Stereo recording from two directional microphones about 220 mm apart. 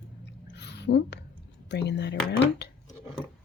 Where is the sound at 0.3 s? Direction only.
50° left (ahead or behind).